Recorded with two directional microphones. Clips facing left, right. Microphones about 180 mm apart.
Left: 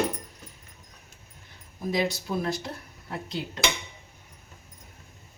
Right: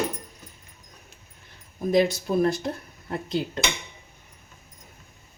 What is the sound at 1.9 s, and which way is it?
Speech, 55° right (ahead or behind).